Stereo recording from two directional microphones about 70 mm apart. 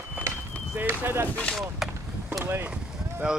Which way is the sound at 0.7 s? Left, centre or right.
Right.